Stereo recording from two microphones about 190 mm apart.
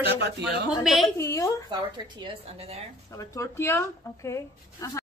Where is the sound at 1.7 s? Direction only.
20° right (ahead or behind).